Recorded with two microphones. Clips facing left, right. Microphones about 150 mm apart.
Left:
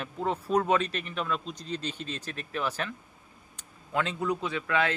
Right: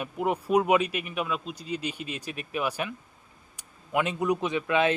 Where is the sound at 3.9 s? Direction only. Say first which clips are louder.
Right 3 dB; 15° right (ahead or behind).